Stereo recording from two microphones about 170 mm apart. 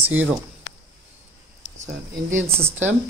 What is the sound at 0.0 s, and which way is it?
Speech, 10° right (ahead or behind).